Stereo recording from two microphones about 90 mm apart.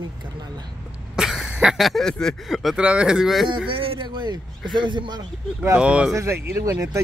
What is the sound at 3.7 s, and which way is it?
Speech, 85° right.